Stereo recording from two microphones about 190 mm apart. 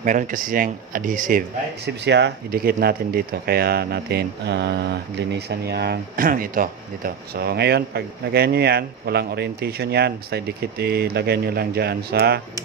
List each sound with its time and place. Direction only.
0.0 s speech: 45° right (ahead or behind)
1.9 s speech: 65° right (ahead or behind)